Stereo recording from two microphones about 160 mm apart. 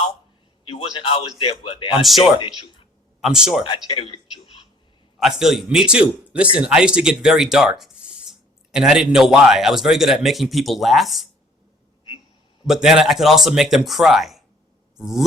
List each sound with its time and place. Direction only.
0.6 s a sound: 35° left (ahead or behind)
1.4 s speech: 35° left (ahead or behind)
2.0 s speech: centre (ahead or behind)
3.8 s speech: 30° left (ahead or behind)
5.2 s speech: centre (ahead or behind)
12.6 s speech: centre (ahead or behind)